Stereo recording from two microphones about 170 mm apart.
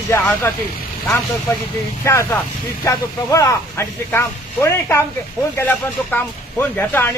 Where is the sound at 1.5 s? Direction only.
15° left (ahead or behind).